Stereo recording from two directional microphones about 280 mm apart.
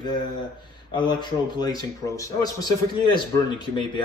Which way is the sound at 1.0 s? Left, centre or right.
Centre.